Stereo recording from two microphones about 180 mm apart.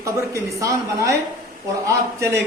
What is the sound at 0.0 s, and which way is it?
A woman's voice, 15° right (ahead or behind).